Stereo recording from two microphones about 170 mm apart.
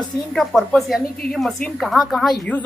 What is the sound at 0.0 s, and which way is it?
A woman's voice, centre (ahead or behind).